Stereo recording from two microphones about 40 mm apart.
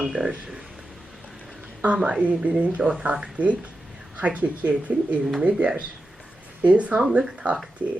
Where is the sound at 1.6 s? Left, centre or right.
Right.